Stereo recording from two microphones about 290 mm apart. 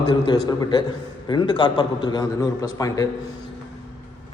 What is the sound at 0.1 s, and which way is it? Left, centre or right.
A man's voice, centre.